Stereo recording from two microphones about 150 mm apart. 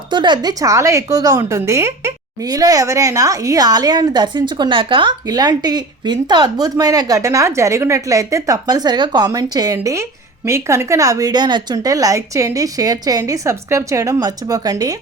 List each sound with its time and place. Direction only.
0.1 s a woman's voice: 30° right (ahead or behind)